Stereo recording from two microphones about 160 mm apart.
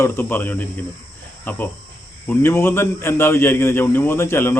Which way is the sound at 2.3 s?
15° left (ahead or behind).